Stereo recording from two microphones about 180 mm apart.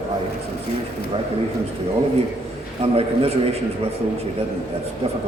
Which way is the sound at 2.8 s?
35° right (ahead or behind).